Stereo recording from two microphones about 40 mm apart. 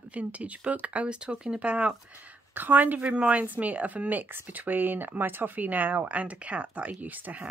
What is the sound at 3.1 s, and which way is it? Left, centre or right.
Speech, right.